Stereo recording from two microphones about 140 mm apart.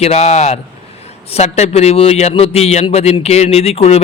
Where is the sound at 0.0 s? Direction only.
50° left (ahead or behind).